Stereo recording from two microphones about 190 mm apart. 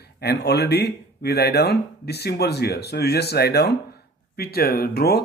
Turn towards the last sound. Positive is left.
turn(degrees=55)  # may be behind; listen again after turning